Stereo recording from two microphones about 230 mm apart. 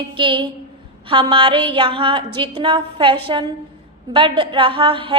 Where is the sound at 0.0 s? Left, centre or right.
Right.